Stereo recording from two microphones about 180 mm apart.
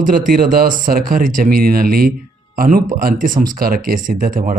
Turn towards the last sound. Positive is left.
turn(degrees=-50)  # may be behind; listen again after turning